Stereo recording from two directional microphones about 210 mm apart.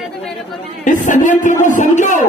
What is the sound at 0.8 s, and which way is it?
A man's voice, 35° left (ahead or behind).